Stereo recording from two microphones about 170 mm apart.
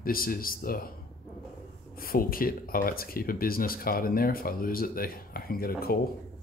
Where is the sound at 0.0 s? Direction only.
60° left (ahead or behind).